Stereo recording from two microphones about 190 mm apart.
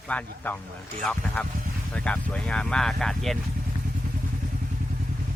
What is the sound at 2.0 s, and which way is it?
Speech, 5° left (ahead or behind).